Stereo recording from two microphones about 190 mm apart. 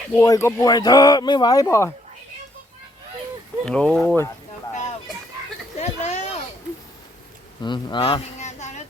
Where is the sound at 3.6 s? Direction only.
5° left (ahead or behind).